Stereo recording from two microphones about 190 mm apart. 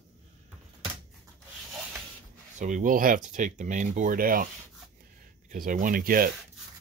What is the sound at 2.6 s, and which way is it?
Speech, 45° right (ahead or behind).